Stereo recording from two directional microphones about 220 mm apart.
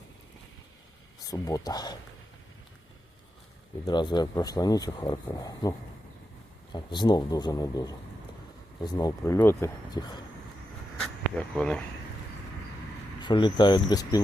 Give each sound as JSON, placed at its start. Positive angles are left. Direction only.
{"t": 1.2, "sound": "speech", "side_deg": 15}
{"t": 3.8, "sound": "speech", "side_deg": 20}
{"t": 6.7, "sound": "speech", "side_deg": 20}
{"t": 11.0, "sound": "a sound", "side_deg": 5}
{"t": 13.1, "sound": "speech", "side_deg": 20}